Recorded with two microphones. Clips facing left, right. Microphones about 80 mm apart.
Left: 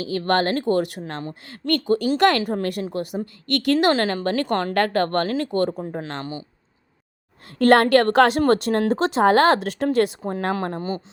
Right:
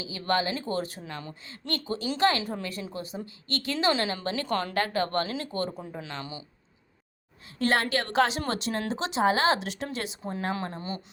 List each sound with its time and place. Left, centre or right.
0.0 s a woman's voice: left
7.6 s speech: left